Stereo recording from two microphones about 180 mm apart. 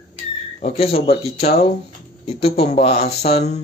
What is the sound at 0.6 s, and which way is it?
Speech, 35° left (ahead or behind).